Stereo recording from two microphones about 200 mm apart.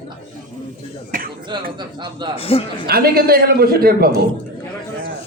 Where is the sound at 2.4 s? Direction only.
30° left (ahead or behind).